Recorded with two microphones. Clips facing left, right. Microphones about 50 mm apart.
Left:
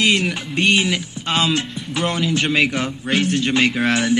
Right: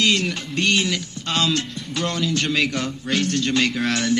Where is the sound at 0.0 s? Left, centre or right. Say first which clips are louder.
Left 3 dB; centre.